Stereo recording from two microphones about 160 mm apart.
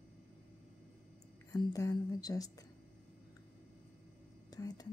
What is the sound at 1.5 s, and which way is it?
A woman's voice, 20° left (ahead or behind).